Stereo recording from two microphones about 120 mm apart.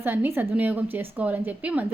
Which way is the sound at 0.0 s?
15° right (ahead or behind).